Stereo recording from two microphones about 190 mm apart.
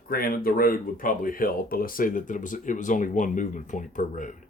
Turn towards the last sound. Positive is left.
turn(degrees=40)  # may be behind; listen again after turning